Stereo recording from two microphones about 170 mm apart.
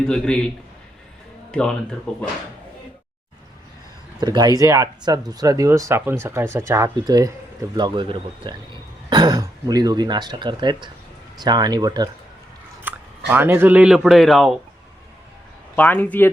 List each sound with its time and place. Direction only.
0.1 s a man's voice: 5° left (ahead or behind)
4.2 s speech: 25° right (ahead or behind)
12.8 s speech: 10° right (ahead or behind)
15.7 s speech: 10° left (ahead or behind)